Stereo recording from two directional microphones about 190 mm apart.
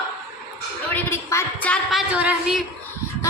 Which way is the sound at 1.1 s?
10° left (ahead or behind).